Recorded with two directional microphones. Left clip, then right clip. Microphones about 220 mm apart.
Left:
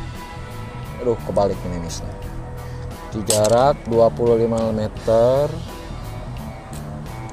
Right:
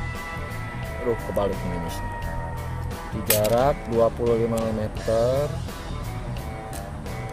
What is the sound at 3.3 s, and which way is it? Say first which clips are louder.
Speech: left 5 dB; 20° left (ahead or behind).